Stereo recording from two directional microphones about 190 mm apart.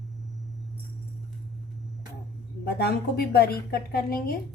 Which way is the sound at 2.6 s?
55° left (ahead or behind).